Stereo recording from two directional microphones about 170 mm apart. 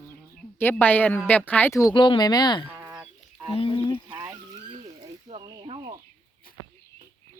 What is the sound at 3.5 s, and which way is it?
Speech, 30° left (ahead or behind).